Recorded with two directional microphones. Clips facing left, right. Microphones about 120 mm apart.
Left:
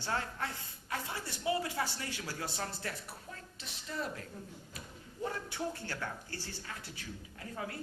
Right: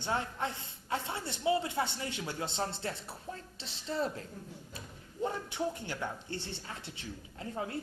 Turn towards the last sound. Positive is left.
turn(degrees=-25)  # may be behind; listen again after turning